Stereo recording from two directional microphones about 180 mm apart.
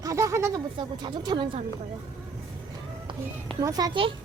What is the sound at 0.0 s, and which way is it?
A child's voice, 20° right (ahead or behind).